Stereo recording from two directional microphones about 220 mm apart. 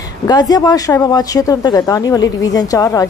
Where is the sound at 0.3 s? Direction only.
20° left (ahead or behind).